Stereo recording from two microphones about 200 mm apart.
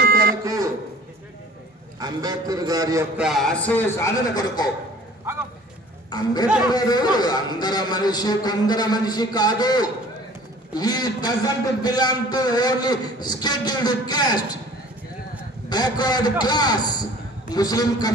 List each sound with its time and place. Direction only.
0.0 s a sound: 50° right (ahead or behind)
2.0 s a man's voice: 20° right (ahead or behind)
3.2 s a man's voice: centre (ahead or behind); by 4.6 s 15° left (ahead or behind)
6.0 s a man's voice: 20° left (ahead or behind)
15.7 s a man's voice: 20° left (ahead or behind)